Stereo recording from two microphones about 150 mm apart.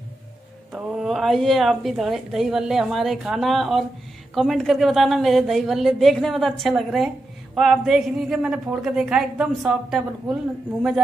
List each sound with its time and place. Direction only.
0.7 s a woman's voice: 5° right (ahead or behind)